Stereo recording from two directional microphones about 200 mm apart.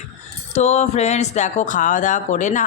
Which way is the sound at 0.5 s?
35° left (ahead or behind).